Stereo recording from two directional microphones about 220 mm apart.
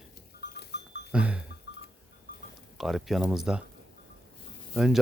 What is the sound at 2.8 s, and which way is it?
Speech, centre (ahead or behind).